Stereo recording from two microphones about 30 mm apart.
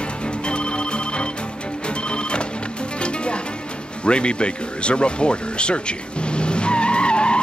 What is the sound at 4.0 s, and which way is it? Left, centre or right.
Speech, left.